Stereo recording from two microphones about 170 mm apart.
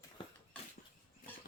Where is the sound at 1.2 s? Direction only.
55° left (ahead or behind).